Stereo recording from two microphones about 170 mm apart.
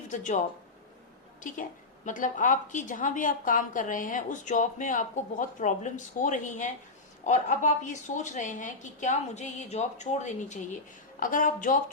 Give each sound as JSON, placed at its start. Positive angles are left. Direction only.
{"t": 0.1, "sound": "speech", "side_deg": 45}
{"t": 1.4, "sound": "a woman's voice", "side_deg": 50}